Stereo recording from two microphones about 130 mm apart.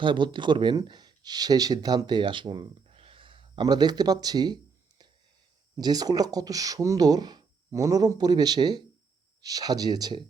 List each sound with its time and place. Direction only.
0.0 s speech: 40° right (ahead or behind)